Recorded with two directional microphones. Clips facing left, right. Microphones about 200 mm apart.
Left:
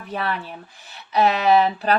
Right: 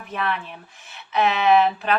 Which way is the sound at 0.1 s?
35° left (ahead or behind).